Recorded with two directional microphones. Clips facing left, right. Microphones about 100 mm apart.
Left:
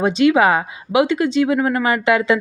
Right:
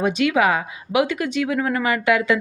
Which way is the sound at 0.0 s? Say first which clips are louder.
Left 4 dB; 30° left (ahead or behind).